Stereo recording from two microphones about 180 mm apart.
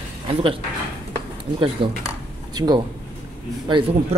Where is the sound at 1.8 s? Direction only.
30° right (ahead or behind).